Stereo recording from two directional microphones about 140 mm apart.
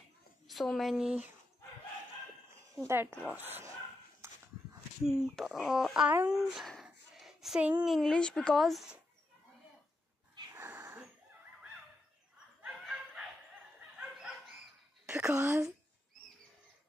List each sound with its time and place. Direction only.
0.5 s speech: centre (ahead or behind)
2.7 s speech: 20° right (ahead or behind)
4.2 s dog: 20° right (ahead or behind)
5.0 s speech: 5° right (ahead or behind)
10.5 s a sound: 20° right (ahead or behind)
12.6 s dog: 5° right (ahead or behind)
15.0 s a woman's voice: 15° right (ahead or behind)